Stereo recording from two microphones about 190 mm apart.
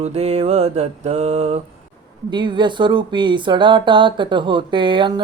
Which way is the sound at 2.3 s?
25° right (ahead or behind).